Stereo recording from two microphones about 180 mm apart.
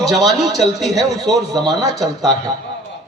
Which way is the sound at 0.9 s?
20° right (ahead or behind).